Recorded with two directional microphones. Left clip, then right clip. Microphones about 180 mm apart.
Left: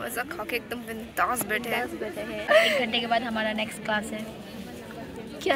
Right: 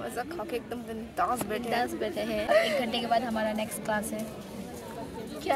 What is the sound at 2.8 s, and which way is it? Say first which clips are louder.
A woman's voice: left 2 dB; 15° right (ahead or behind).